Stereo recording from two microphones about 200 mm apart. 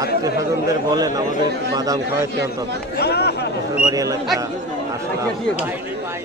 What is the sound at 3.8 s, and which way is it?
Speech, 15° right (ahead or behind).